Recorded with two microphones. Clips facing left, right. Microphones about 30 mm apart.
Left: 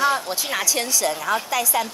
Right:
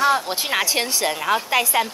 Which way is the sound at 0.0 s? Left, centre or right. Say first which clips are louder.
Right 2 dB; centre.